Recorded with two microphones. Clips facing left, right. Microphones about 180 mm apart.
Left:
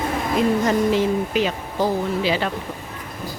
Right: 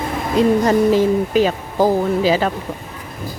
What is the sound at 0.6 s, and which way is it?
Speech, 40° right (ahead or behind).